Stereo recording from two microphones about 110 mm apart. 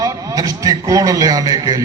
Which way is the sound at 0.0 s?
35° right (ahead or behind).